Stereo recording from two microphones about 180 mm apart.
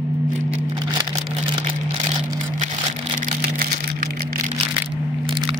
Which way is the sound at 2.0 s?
45° right (ahead or behind).